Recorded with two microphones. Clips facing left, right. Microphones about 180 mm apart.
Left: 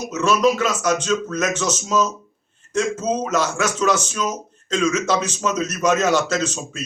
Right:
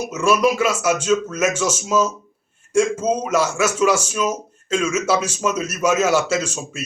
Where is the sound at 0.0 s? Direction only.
10° right (ahead or behind).